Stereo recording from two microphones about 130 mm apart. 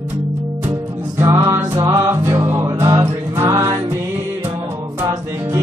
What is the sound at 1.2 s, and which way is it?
Music, 20° right (ahead or behind).